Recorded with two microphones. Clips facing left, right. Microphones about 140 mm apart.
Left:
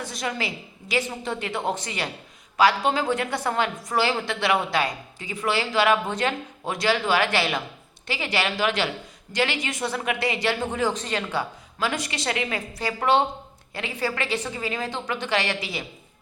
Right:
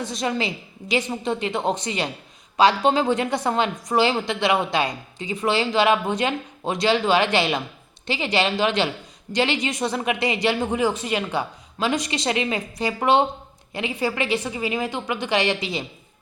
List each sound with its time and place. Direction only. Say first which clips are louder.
0.0 s a woman's voice: right 4 dB; 25° right (ahead or behind)